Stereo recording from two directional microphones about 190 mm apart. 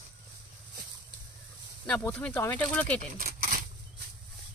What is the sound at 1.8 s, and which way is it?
Speech, 5° left (ahead or behind).